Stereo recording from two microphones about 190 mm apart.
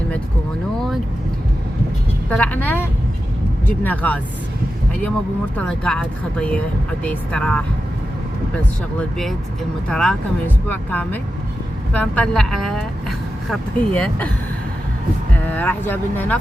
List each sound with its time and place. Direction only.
2.3 s speech: 5° left (ahead or behind)
5.5 s a woman's voice: 5° left (ahead or behind)
9.0 s a woman's voice: centre (ahead or behind)
15.4 s speech: 10° left (ahead or behind)